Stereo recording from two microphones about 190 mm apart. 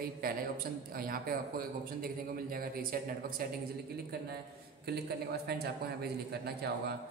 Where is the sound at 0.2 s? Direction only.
50° right (ahead or behind).